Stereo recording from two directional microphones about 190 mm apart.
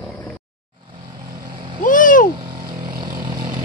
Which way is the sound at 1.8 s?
45° left (ahead or behind).